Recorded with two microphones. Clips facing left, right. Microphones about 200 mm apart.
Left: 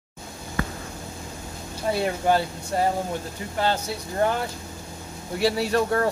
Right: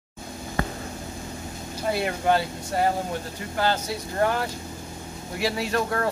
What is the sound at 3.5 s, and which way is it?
Speech, 25° left (ahead or behind).